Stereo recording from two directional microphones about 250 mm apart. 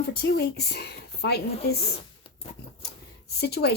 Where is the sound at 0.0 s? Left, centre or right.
Left.